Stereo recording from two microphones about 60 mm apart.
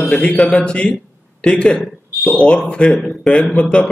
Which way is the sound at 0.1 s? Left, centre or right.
Centre.